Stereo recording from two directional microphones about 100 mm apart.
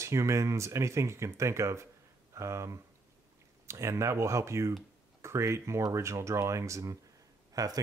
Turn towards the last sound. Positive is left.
turn(degrees=-40)  # may be behind; listen again after turning